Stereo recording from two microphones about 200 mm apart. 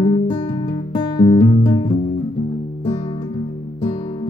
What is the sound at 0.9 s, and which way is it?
Music, 25° left (ahead or behind).